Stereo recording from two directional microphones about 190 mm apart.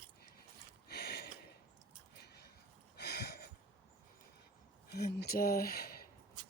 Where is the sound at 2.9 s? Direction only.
60° left (ahead or behind).